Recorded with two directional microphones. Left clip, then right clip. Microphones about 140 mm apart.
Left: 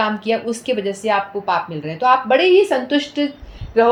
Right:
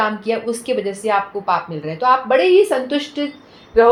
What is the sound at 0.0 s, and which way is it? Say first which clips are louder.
Speech: even; 50° left (ahead or behind).